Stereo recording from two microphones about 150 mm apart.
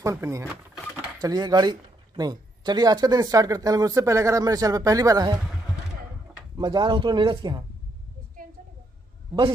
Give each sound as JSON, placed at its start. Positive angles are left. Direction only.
{"t": 0.0, "sound": "speech", "side_deg": -20}
{"t": 6.6, "sound": "speech", "side_deg": -30}